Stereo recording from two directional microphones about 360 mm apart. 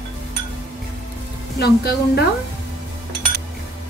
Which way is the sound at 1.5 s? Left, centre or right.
Left.